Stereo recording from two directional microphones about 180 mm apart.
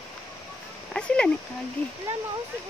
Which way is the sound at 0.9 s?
5° left (ahead or behind).